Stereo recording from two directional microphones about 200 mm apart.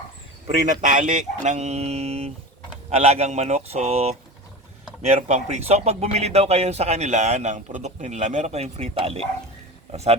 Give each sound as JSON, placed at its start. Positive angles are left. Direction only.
{"t": 0.4, "sound": "speech", "side_deg": -40}